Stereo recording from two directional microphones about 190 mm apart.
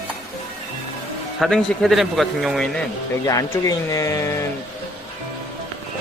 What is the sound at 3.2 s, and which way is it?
Speech, 20° left (ahead or behind).